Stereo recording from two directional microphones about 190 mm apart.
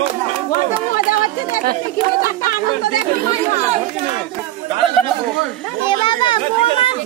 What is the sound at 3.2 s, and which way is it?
Speech, 35° right (ahead or behind).